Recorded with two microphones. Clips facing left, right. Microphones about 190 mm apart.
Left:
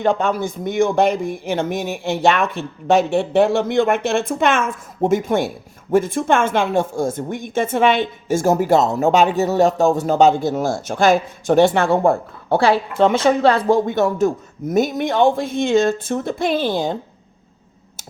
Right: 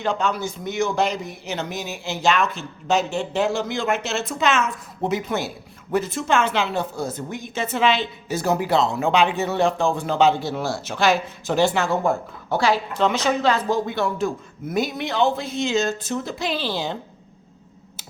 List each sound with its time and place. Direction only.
0.0 s a woman's voice: 55° left (ahead or behind)
12.5 s speech: 30° left (ahead or behind)
12.9 s a woman's voice: 50° left (ahead or behind)
13.6 s speech: 30° left (ahead or behind)
13.8 s a woman's voice: 45° left (ahead or behind)